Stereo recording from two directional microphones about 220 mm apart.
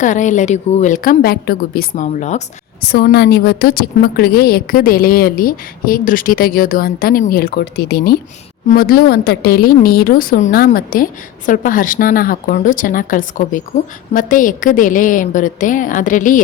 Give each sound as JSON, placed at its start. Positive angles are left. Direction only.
{"t": 0.0, "sound": "a woman's voice", "side_deg": 35}
{"t": 2.8, "sound": "a woman's voice", "side_deg": 45}